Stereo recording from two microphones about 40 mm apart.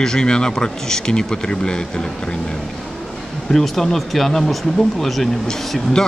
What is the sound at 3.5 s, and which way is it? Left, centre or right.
Speech, centre.